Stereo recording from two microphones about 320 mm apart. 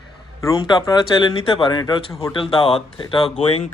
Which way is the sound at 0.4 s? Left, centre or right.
Centre.